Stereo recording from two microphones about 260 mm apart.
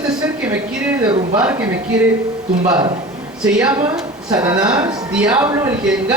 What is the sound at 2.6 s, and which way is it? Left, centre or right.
Speech, centre.